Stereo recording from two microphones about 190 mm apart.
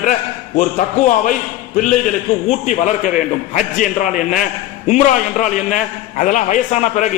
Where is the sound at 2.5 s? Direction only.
40° left (ahead or behind).